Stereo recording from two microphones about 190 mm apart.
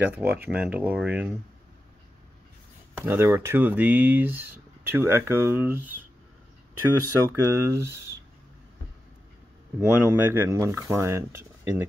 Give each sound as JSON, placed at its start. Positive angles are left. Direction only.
{"t": 0.0, "sound": "speech", "side_deg": -10}
{"t": 3.0, "sound": "speech", "side_deg": -10}
{"t": 7.2, "sound": "speech", "side_deg": -15}
{"t": 9.8, "sound": "speech", "side_deg": -10}